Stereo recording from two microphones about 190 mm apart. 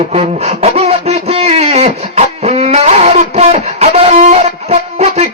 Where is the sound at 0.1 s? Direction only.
35° right (ahead or behind).